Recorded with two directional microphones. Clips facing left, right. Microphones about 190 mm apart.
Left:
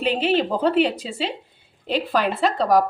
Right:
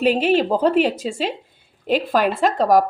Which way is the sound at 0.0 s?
45° right (ahead or behind).